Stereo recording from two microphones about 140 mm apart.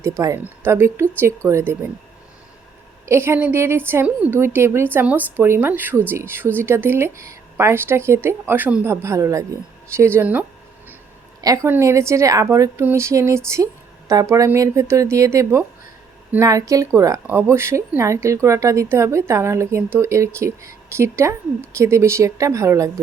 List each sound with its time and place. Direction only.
0.2 s speech: 25° right (ahead or behind)
3.1 s speech: 20° right (ahead or behind)
11.3 s a woman's voice: 25° right (ahead or behind)